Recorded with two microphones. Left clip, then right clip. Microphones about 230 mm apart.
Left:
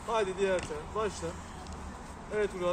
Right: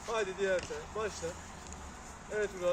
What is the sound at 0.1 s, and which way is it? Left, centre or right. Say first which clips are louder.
Speech: left 3 dB; left.